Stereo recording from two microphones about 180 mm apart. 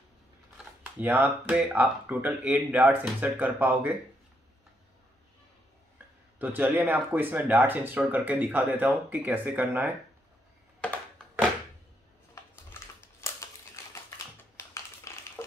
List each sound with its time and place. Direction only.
0.9 s speech: 10° right (ahead or behind)
6.3 s speech: 10° right (ahead or behind)
12.4 s typing: 15° left (ahead or behind)
14.7 s a sound: 15° left (ahead or behind)